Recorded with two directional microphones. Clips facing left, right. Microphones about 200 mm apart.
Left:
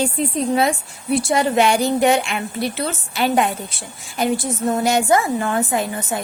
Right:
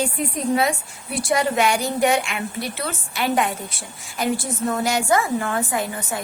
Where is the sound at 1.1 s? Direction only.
25° left (ahead or behind).